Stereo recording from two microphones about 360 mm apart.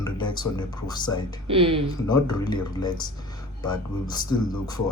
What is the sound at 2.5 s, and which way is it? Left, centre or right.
Speech, centre.